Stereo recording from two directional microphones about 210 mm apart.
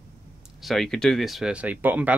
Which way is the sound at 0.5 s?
Centre (ahead or behind).